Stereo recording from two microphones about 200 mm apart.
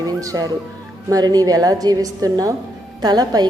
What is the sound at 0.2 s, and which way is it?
A woman's voice, 20° right (ahead or behind).